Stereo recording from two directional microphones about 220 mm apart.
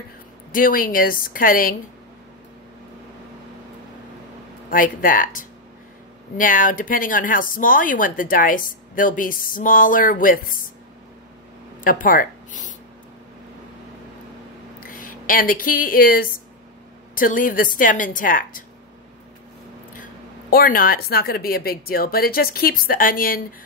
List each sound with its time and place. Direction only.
0.5 s speech: 40° left (ahead or behind)
4.6 s speech: 40° left (ahead or behind)
11.8 s speech: 40° left (ahead or behind)
14.8 s speech: 40° left (ahead or behind)
19.9 s speech: 40° left (ahead or behind)